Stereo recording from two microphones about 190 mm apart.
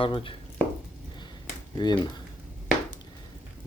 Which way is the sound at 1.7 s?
25° left (ahead or behind).